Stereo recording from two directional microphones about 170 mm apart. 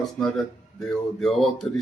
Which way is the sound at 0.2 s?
5° left (ahead or behind).